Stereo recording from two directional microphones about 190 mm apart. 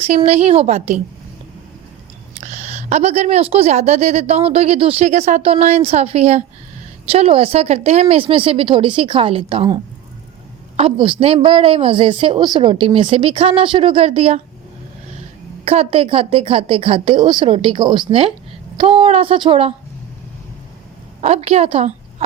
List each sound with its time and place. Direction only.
0.0 s a woman's voice: 35° right (ahead or behind)
2.4 s a woman's voice: 35° right (ahead or behind)
15.6 s a woman's voice: 30° right (ahead or behind)
21.2 s a woman's voice: 35° right (ahead or behind)